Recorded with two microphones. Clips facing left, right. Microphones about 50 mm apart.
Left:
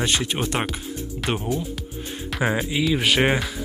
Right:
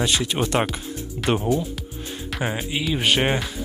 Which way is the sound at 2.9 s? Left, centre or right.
Left.